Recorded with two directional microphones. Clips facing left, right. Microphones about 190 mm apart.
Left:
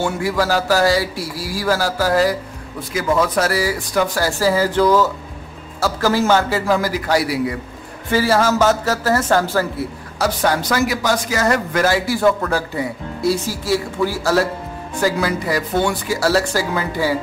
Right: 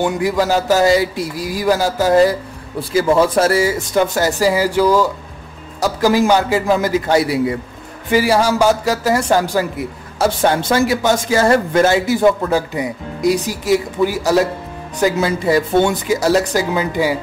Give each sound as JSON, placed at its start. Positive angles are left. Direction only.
{"t": 0.0, "sound": "a man's voice", "side_deg": -20}
{"t": 8.1, "sound": "a man's voice", "side_deg": -15}
{"t": 10.1, "sound": "a man's voice", "side_deg": -25}